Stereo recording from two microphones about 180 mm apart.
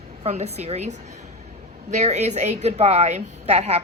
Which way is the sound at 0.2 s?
35° right (ahead or behind).